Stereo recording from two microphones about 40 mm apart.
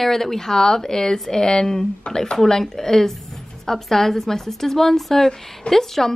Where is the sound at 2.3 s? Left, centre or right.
Centre.